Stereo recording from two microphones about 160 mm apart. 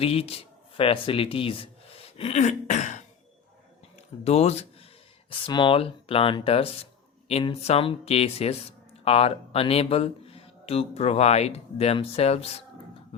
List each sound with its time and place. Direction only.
0.0 s speech: 40° left (ahead or behind)
4.2 s speech: 40° left (ahead or behind)
5.3 s speech: 30° left (ahead or behind)